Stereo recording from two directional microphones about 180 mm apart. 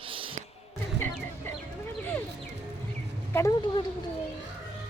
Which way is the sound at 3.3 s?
20° left (ahead or behind).